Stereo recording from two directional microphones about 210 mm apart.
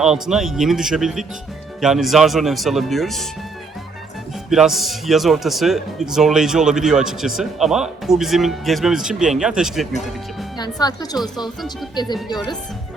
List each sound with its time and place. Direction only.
0.0 s speech: centre (ahead or behind)
4.4 s speech: centre (ahead or behind)
10.6 s speech: 20° left (ahead or behind)